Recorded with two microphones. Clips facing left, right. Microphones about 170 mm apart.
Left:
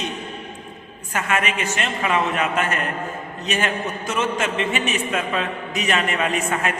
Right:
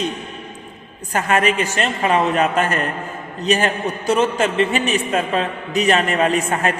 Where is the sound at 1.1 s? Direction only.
35° right (ahead or behind).